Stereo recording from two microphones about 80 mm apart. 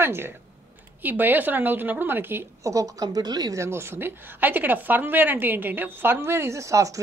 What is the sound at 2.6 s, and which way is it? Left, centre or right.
Speech, right.